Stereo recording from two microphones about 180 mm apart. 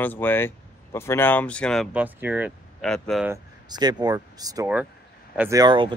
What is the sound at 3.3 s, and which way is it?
Speech, 20° right (ahead or behind).